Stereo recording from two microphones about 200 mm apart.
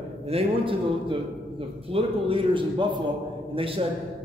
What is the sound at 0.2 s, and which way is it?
Speech, 30° right (ahead or behind).